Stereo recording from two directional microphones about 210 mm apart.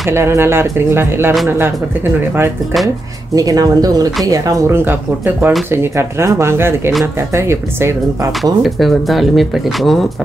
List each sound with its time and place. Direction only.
0.1 s speech: 10° right (ahead or behind)
3.3 s speech: 15° right (ahead or behind)
8.6 s speech: centre (ahead or behind)